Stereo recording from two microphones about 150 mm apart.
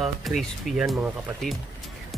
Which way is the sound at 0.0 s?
Centre (ahead or behind).